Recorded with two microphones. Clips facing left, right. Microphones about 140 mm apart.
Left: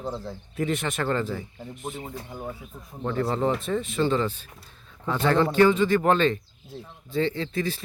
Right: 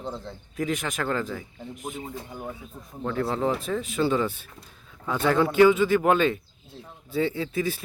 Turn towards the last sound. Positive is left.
turn(degrees=-10)  # may be behind; listen again after turning